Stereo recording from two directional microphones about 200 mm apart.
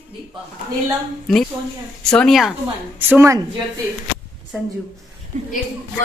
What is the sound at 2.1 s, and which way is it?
Speech, centre (ahead or behind).